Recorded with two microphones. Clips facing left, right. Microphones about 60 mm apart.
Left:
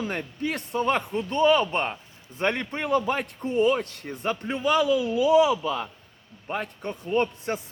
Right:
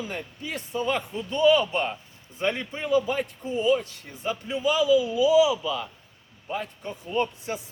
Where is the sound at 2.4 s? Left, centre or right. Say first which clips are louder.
Left 2 dB; left.